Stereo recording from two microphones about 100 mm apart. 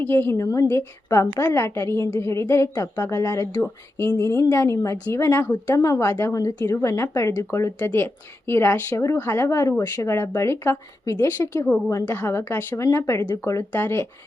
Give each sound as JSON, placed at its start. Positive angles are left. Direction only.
{"t": 0.0, "sound": "a woman's voice", "side_deg": 20}